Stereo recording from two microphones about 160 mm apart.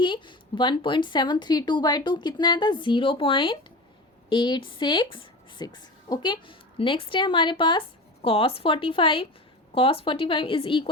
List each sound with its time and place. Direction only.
0.0 s a woman's voice: 30° left (ahead or behind)